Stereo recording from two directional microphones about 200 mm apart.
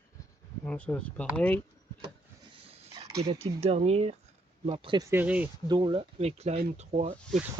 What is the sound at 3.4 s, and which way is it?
Speech, 30° right (ahead or behind).